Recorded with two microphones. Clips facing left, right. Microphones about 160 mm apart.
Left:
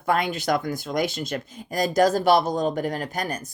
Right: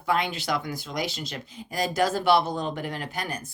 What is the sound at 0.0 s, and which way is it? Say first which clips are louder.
Speech: left 3 dB; 50° left (ahead or behind).